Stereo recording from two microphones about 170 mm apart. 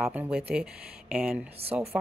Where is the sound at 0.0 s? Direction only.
5° right (ahead or behind).